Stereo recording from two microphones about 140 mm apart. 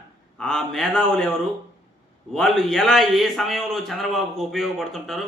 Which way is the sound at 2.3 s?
Centre (ahead or behind).